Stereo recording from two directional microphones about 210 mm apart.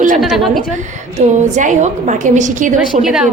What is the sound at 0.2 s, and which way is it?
Speech, centre (ahead or behind).